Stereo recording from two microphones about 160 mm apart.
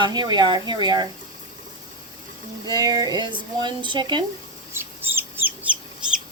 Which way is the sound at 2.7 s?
25° right (ahead or behind).